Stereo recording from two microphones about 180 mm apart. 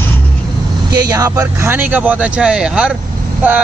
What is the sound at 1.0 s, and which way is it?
Speech, 20° right (ahead or behind).